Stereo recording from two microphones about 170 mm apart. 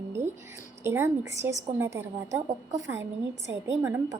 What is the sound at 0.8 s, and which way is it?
A woman's voice, 15° right (ahead or behind).